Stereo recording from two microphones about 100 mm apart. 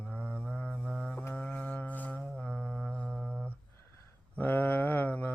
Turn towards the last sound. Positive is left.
turn(degrees=20)  # may be behind; listen again after turning